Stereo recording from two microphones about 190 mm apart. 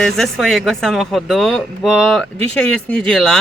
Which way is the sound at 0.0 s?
Centre (ahead or behind).